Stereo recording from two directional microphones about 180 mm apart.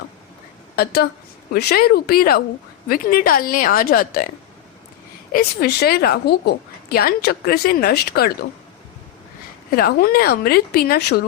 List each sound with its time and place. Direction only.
1.5 s a woman's voice: 60° left (ahead or behind)
5.3 s a woman's voice: 55° left (ahead or behind)
9.6 s a woman's voice: 55° left (ahead or behind)